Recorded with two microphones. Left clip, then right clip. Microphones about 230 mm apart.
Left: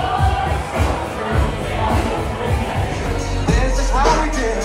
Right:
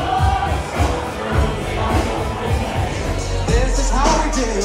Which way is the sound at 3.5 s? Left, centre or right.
Right.